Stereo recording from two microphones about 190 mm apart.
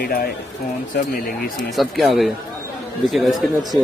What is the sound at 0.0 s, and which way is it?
Speech, 55° left (ahead or behind).